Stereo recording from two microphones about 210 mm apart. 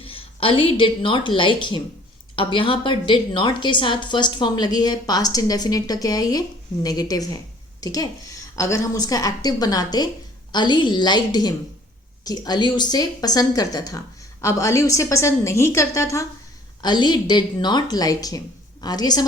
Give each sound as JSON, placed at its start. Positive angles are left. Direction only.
{"t": 0.0, "sound": "a woman's voice", "side_deg": 25}